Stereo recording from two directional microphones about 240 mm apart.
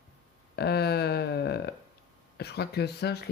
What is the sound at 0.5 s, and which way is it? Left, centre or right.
Speech, left.